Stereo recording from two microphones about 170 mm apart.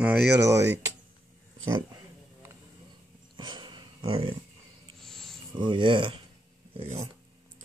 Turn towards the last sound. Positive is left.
turn(degrees=-35)  # may be behind; listen again after turning